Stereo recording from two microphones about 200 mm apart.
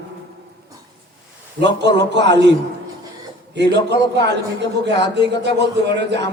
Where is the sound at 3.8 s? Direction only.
60° right (ahead or behind).